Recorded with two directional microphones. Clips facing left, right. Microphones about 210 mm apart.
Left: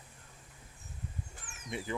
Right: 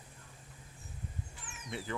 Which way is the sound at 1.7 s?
15° left (ahead or behind).